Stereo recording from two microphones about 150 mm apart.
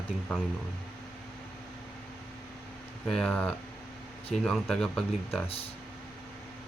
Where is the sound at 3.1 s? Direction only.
5° left (ahead or behind).